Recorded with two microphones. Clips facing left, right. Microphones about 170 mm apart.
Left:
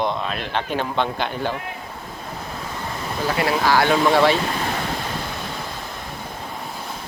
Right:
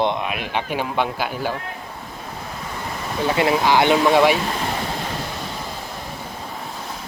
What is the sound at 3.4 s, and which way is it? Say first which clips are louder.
Speech: right 2 dB; 20° right (ahead or behind).